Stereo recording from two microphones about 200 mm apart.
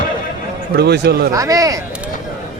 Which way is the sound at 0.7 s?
55° right (ahead or behind).